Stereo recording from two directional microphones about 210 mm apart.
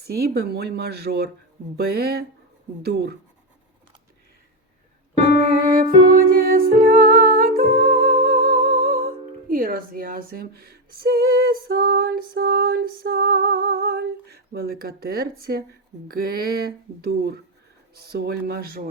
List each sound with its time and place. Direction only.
0.1 s speech: 50° right (ahead or behind)
5.5 s music: 45° right (ahead or behind)
16.0 s speech: 45° right (ahead or behind)